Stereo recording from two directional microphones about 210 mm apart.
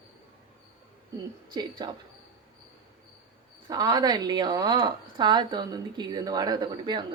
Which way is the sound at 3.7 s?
20° right (ahead or behind).